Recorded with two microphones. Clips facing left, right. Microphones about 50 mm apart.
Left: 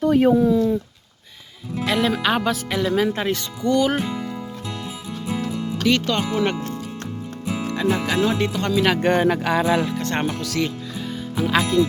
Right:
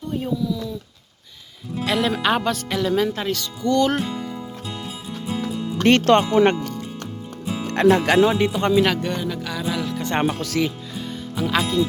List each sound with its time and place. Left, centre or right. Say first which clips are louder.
0.0 s speech: left 10 dB; left
1.8 s speech: even; centre
3.2 s speech: left 1 dB; left
3.8 s speech: right 1 dB; centre
5.8 s speech: right 6 dB; right
7.7 s speech: right 7 dB; right
8.2 s speech: right 3 dB; centre
9.0 s speech: left 7 dB; left
10.0 s speech: right 1 dB; centre
10.2 s speech: right 2 dB; right
10.9 s music: left 2 dB; centre